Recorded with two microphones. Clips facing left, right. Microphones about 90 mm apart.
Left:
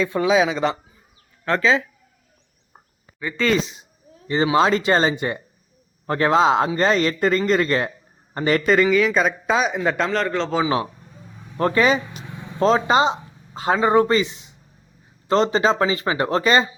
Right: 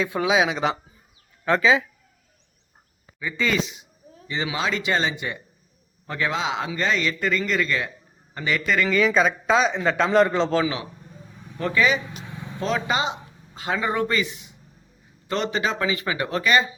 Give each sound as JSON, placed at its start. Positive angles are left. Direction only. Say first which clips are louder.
{"t": 0.0, "sound": "speech", "louder": "left 3 dB", "side_deg": -5}
{"t": 3.2, "sound": "speech", "louder": "left 3 dB", "side_deg": -5}
{"t": 3.5, "sound": "speech", "louder": "left 4 dB", "side_deg": 35}
{"t": 8.9, "sound": "speech", "louder": "left 2 dB", "side_deg": 0}
{"t": 10.1, "sound": "speech", "louder": "right 4 dB", "side_deg": -15}
{"t": 11.5, "sound": "speech", "louder": "left 4 dB", "side_deg": 45}